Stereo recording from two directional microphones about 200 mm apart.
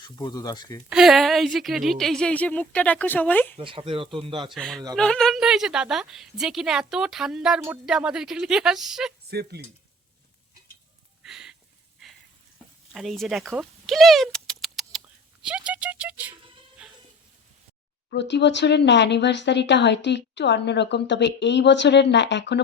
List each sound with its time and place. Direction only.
0.2 s speech: 20° left (ahead or behind)
0.9 s a woman's voice: centre (ahead or behind)
3.6 s speech: 25° right (ahead or behind)
4.5 s a woman's voice: centre (ahead or behind)
9.3 s speech: 50° right (ahead or behind)
11.2 s a sound: 5° right (ahead or behind)
12.9 s speech: centre (ahead or behind)
18.1 s speech: 60° left (ahead or behind)